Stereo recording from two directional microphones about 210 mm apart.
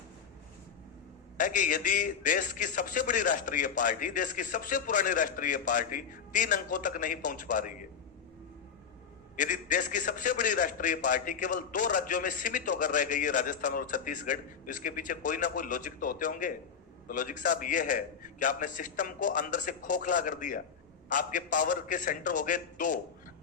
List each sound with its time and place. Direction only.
1.4 s a man's voice: 40° left (ahead or behind)
9.3 s a man's voice: 40° left (ahead or behind)